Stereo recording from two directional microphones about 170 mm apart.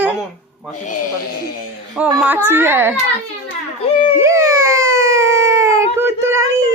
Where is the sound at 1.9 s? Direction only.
10° right (ahead or behind).